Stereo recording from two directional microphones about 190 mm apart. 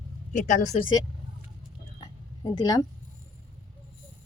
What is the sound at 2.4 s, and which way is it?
Speech, 20° left (ahead or behind).